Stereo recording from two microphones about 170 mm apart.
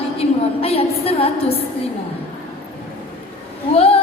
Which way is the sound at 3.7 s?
35° left (ahead or behind).